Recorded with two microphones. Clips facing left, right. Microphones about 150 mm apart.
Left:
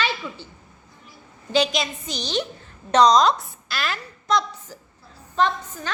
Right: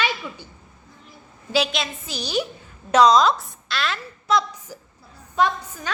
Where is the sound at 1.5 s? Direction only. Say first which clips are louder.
Left 2 dB; centre (ahead or behind).